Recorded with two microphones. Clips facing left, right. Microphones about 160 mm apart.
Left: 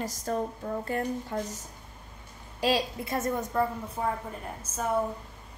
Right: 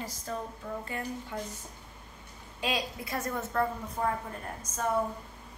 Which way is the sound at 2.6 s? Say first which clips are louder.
Left 6 dB; 30° left (ahead or behind).